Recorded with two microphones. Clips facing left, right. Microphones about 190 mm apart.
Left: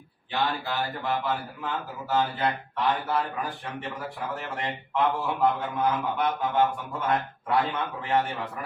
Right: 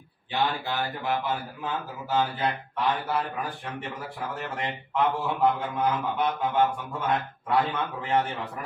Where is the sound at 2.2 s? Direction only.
Centre (ahead or behind).